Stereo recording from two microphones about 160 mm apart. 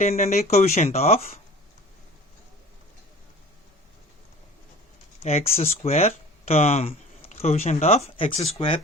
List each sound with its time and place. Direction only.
0.0 s speech: 45° left (ahead or behind)
5.2 s speech: 40° left (ahead or behind)